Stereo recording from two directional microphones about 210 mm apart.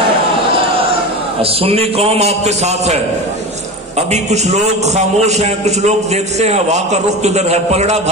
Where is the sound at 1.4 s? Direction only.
25° right (ahead or behind).